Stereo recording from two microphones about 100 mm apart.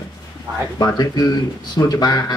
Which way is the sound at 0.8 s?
40° left (ahead or behind).